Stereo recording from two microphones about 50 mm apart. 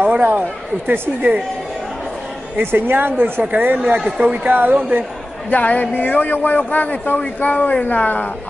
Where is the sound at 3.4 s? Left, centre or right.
Right.